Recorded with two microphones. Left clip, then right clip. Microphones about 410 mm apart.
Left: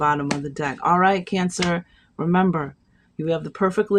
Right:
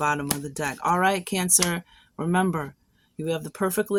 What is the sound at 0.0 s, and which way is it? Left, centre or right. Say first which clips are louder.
Speech: left 4 dB; right.